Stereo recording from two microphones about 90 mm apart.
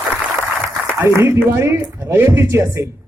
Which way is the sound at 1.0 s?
25° right (ahead or behind).